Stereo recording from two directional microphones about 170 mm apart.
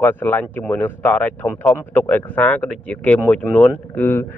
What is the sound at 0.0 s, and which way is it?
A man's voice, 10° left (ahead or behind).